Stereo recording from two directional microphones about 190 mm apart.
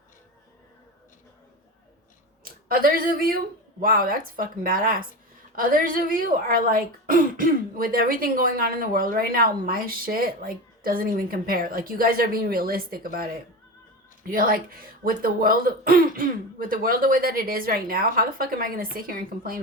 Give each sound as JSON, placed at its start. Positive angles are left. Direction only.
{"t": 2.4, "sound": "speech", "side_deg": -50}